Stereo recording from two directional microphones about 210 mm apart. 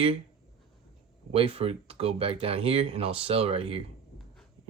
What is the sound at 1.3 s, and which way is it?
Speech, 30° right (ahead or behind).